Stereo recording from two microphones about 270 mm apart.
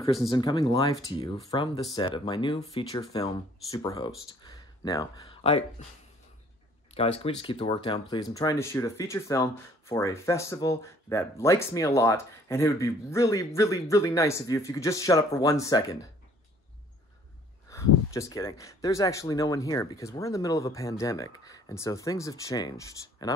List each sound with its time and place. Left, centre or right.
0.3 s speech: centre
6.9 s speech: left
17.7 s a sound: centre
18.1 s speech: centre